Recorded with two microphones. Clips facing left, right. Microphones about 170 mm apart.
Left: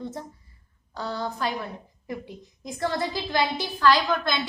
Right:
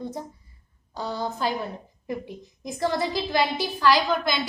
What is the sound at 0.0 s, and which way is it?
A woman's voice, 15° right (ahead or behind).